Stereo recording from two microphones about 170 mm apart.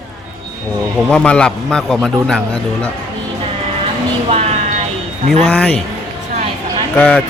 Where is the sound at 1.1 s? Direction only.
5° left (ahead or behind).